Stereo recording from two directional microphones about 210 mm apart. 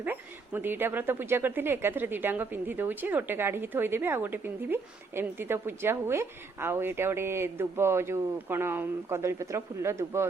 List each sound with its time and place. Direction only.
0.0 s a woman's voice: 10° right (ahead or behind)